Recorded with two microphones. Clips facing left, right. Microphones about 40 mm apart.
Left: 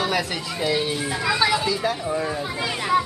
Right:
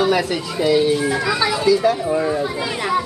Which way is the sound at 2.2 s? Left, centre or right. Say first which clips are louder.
Right 6 dB; centre.